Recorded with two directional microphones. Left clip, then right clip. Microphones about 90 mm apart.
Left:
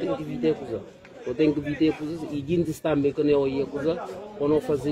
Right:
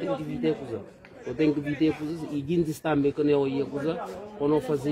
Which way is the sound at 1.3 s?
45° right (ahead or behind).